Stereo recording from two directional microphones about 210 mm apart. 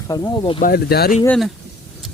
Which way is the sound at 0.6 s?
50° left (ahead or behind).